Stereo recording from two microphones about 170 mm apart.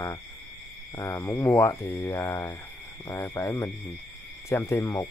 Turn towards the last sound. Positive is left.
turn(degrees=15)  # may be behind; listen again after turning